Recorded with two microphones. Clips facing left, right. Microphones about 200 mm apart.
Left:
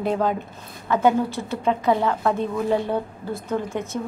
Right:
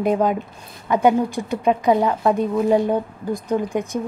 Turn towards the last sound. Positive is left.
turn(degrees=-15)  # may be behind; listen again after turning